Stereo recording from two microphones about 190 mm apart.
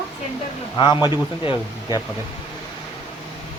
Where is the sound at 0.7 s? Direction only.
25° left (ahead or behind).